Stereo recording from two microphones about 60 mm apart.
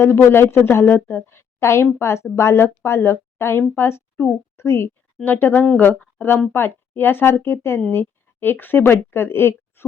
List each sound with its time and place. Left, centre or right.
0.0 s a woman's voice: left
5.2 s speech: left